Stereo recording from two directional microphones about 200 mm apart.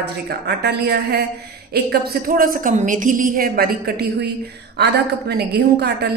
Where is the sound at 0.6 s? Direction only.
55° right (ahead or behind).